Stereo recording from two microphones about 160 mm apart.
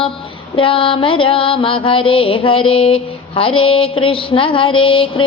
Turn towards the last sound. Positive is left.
turn(degrees=35)  # may be behind; listen again after turning